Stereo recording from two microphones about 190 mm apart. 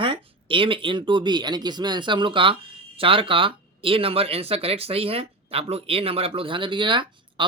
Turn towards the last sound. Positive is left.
turn(degrees=-25)  # may be behind; listen again after turning